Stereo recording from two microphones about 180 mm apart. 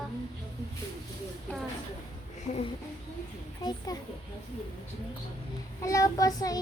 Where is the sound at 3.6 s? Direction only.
25° left (ahead or behind).